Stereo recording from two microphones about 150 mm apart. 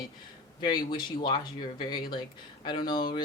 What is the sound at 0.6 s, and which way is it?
A woman's voice, 30° left (ahead or behind).